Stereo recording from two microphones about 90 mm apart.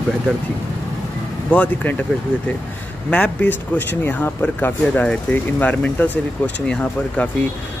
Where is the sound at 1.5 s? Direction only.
15° left (ahead or behind).